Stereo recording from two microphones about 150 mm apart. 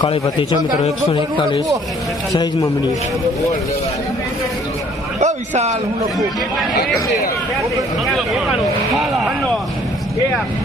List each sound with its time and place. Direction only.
0.0 s a man's voice: 35° left (ahead or behind)
5.2 s a sound: 50° right (ahead or behind)
8.0 s speech: centre (ahead or behind)